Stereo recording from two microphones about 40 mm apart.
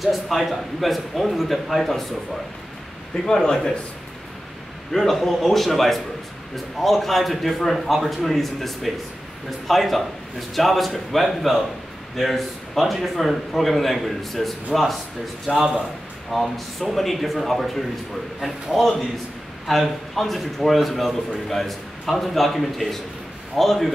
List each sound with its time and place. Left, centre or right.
0.0 s speech: centre
3.3 s a man's voice: centre
5.1 s speech: centre
15.5 s speech: centre
16.3 s speech: centre